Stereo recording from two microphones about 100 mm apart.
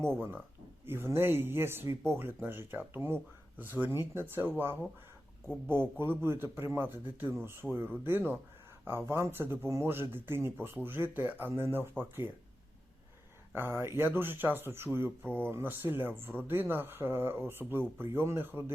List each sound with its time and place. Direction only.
0.2 s speech: 20° right (ahead or behind)
13.5 s speech: 20° right (ahead or behind)